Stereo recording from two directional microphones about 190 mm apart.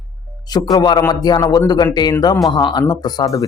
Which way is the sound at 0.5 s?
20° left (ahead or behind).